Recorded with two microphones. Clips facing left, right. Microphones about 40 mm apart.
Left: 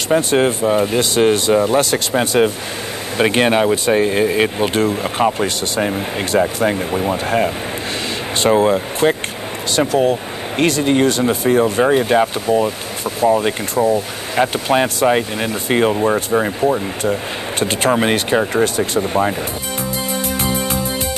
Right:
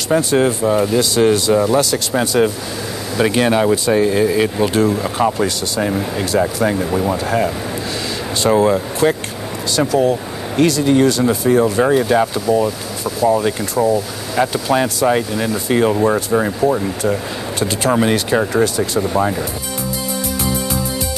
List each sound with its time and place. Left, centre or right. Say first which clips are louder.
0.2 s speech: even; left
5.2 s speech: left 1 dB; left
9.8 s speech: even; left
16.3 s speech: even; centre
17.6 s speech: left 1 dB; left
17.9 s speech: right 2 dB; left
19.1 s speech: even; left
19.8 s music: left 1 dB; left